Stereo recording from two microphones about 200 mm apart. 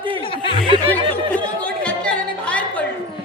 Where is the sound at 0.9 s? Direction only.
5° left (ahead or behind).